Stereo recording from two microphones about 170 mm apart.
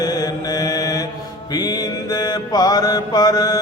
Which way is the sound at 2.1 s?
25° left (ahead or behind).